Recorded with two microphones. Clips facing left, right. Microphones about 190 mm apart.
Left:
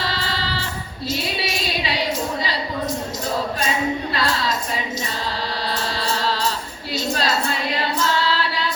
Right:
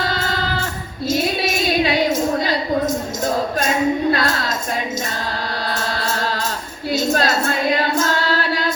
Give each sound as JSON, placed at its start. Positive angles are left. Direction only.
{"t": 0.0, "sound": "music", "side_deg": -50}
{"t": 1.1, "sound": "a sound", "side_deg": -50}
{"t": 3.6, "sound": "speech", "side_deg": -50}
{"t": 6.0, "sound": "music", "side_deg": -50}
{"t": 6.9, "sound": "female singing", "side_deg": -50}